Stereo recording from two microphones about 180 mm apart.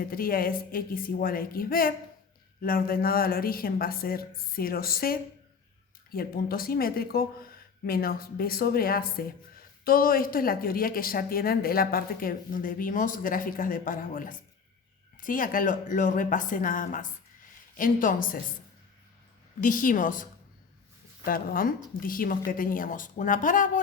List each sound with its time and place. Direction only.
0.0 s speech: 55° left (ahead or behind)
19.6 s speech: 50° left (ahead or behind)
21.2 s speech: 50° left (ahead or behind)